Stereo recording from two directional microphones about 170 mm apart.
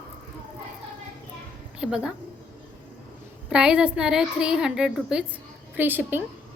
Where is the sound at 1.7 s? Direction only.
5° right (ahead or behind).